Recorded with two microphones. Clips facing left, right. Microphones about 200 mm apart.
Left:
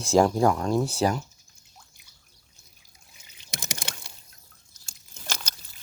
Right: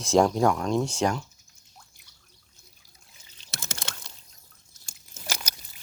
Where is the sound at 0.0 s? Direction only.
Centre (ahead or behind).